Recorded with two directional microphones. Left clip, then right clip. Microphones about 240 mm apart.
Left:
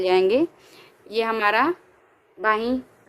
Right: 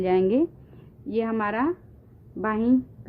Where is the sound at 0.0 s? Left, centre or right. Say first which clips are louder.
Left 3 dB; centre.